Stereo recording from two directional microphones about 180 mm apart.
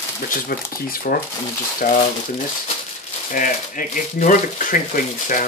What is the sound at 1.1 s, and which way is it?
Speech, 65° left (ahead or behind).